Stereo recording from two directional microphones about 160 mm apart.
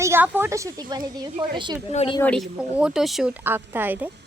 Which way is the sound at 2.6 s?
5° right (ahead or behind).